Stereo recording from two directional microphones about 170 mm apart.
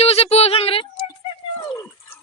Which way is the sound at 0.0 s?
40° left (ahead or behind).